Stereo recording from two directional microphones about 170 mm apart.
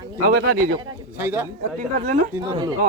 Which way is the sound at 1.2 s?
10° right (ahead or behind).